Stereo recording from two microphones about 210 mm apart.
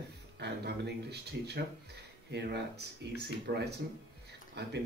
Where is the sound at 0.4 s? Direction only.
50° right (ahead or behind).